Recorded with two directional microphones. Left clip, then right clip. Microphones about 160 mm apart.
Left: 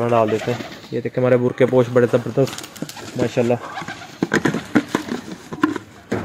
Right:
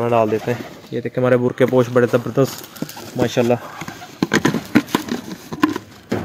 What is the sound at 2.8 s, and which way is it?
Bird, 90° right.